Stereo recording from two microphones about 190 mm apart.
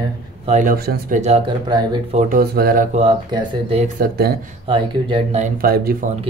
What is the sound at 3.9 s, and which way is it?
Speech, 55° right (ahead or behind).